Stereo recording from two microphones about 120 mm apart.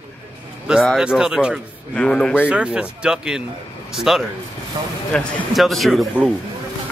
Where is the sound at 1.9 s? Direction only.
5° left (ahead or behind).